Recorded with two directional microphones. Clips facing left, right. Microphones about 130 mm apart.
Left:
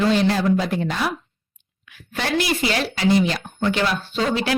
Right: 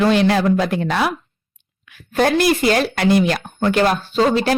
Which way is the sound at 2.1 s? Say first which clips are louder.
Right 7 dB; 50° right (ahead or behind).